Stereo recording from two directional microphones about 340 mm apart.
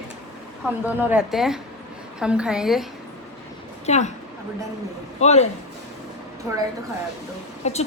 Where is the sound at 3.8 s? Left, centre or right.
Centre.